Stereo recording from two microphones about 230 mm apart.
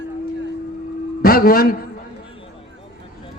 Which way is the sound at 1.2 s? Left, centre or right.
Left.